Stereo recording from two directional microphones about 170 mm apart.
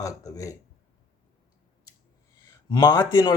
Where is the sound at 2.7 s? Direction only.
25° left (ahead or behind).